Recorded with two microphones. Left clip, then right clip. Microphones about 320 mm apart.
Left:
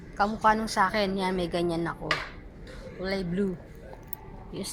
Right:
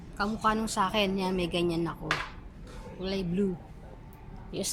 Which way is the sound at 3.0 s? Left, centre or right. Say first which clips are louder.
Left 2 dB; centre.